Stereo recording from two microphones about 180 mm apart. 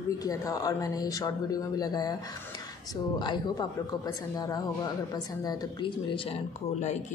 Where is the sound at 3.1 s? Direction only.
25° left (ahead or behind).